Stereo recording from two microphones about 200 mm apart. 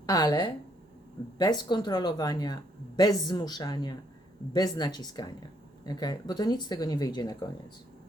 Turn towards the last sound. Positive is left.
turn(degrees=20)  # may be behind; listen again after turning